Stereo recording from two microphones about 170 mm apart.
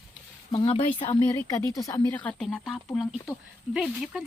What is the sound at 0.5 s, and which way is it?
Speech, 30° left (ahead or behind).